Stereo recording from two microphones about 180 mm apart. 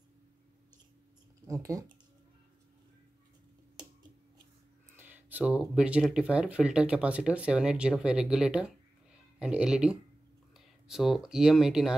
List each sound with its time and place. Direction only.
1.4 s speech: 15° right (ahead or behind)
4.9 s speech: 10° right (ahead or behind)